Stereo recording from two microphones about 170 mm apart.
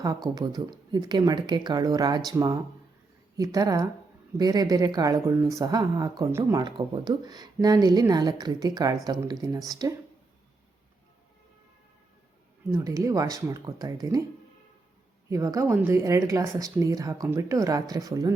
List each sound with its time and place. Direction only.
0.3 s speech: 25° right (ahead or behind)
12.7 s speech: 20° right (ahead or behind)
15.3 s speech: 20° right (ahead or behind)